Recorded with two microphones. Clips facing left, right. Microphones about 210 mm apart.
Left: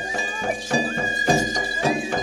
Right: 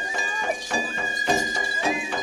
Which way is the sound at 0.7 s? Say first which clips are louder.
Left 6 dB; 40° left (ahead or behind).